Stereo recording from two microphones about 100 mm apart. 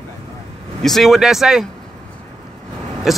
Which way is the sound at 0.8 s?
Centre (ahead or behind).